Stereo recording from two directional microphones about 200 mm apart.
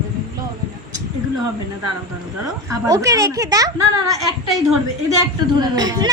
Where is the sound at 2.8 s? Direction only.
15° right (ahead or behind).